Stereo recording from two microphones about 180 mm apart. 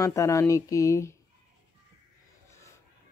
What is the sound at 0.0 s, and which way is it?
Speech, 15° left (ahead or behind).